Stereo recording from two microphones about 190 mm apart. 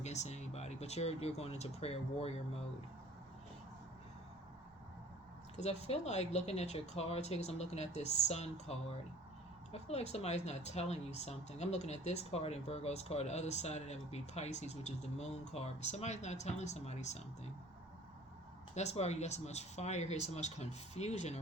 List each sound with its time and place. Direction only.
0.0 s speech: 35° left (ahead or behind)
5.5 s speech: 35° left (ahead or behind)
18.7 s speech: 35° left (ahead or behind)